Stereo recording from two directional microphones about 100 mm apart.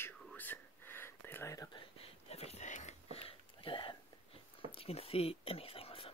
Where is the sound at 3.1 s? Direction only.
60° left (ahead or behind).